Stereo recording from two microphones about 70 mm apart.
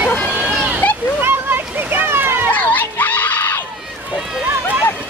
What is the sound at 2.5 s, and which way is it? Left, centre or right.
Children playing, left.